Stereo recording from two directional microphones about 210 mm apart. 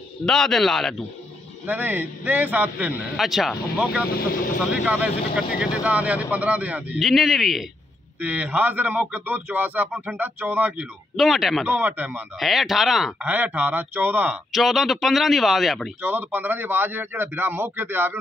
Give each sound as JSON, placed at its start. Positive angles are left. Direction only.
{"t": 0.2, "sound": "a man's voice", "side_deg": 0}